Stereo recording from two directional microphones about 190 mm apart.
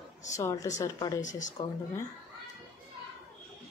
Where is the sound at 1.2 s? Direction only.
40° left (ahead or behind).